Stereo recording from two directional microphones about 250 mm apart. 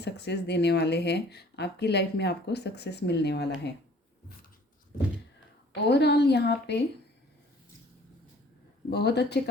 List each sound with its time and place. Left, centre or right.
0.0 s speech: left
5.9 s speech: left
8.9 s speech: left